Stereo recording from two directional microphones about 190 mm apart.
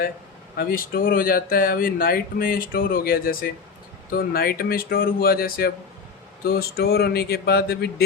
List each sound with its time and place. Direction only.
0.5 s speech: 50° left (ahead or behind)